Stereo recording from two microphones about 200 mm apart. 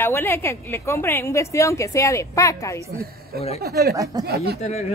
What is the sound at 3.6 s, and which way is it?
Speech, 50° right (ahead or behind).